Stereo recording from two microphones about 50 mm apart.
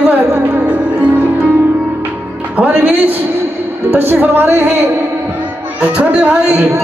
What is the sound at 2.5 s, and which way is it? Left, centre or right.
Speech, right.